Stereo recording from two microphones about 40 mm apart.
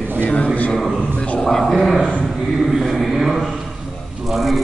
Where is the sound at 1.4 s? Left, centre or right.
Centre.